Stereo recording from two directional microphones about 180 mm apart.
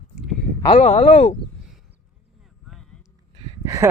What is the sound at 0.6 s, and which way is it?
Speech, 40° left (ahead or behind).